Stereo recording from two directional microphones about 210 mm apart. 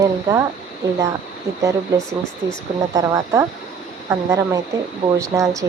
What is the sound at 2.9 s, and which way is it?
Speech, 15° right (ahead or behind).